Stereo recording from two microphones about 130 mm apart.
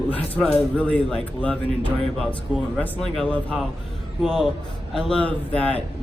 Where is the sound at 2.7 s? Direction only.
15° left (ahead or behind).